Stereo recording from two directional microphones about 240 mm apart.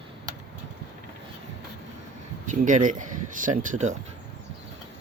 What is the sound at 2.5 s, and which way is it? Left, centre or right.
Speech, right.